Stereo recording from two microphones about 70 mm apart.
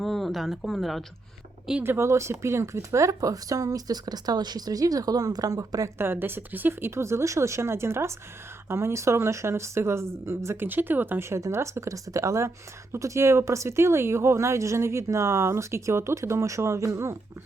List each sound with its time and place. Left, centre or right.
0.0 s speech: centre
1.8 s speech: right
6.0 s speech: right
10.7 s speech: right
11.2 s speech: right